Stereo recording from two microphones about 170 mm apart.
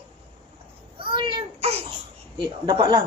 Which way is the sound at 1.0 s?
30° right (ahead or behind).